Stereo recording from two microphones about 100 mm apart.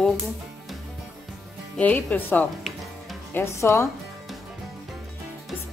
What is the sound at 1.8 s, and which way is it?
Speech, 15° left (ahead or behind).